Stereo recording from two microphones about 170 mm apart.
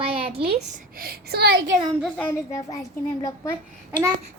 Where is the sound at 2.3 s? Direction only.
20° left (ahead or behind).